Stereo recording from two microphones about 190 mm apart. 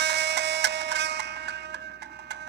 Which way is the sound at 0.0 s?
65° right (ahead or behind).